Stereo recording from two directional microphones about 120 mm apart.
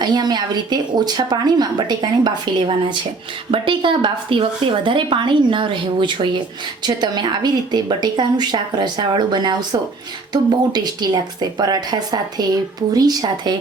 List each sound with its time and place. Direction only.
0.0 s a woman's voice: 35° right (ahead or behind)